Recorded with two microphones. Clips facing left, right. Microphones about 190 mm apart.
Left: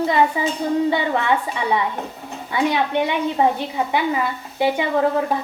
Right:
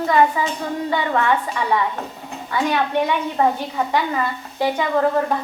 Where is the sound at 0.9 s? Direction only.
20° left (ahead or behind).